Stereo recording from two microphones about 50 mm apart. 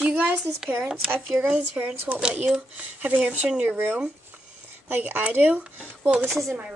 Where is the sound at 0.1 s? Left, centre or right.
Right.